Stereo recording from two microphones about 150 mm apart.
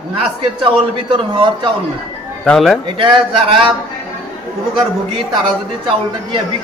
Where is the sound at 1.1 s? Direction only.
35° right (ahead or behind).